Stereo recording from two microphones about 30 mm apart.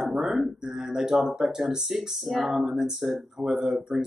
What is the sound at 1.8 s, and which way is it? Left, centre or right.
Speech, centre.